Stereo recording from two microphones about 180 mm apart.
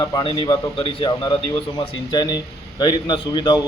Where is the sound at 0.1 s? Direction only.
30° left (ahead or behind).